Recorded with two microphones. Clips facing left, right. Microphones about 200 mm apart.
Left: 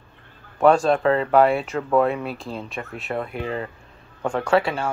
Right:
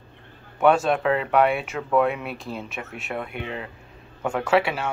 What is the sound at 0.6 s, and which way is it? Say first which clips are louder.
A man's voice: left 3 dB; centre (ahead or behind).